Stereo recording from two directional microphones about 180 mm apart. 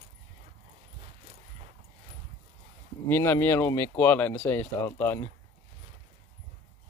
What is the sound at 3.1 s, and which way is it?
Speech, 15° left (ahead or behind).